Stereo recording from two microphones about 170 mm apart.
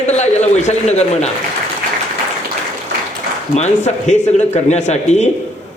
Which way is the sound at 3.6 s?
40° left (ahead or behind).